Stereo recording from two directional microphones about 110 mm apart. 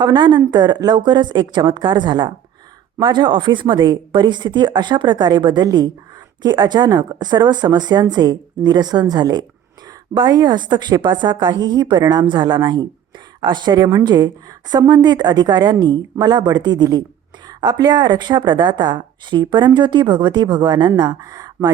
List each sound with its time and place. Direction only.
0.0 s a woman's voice: 45° right (ahead or behind)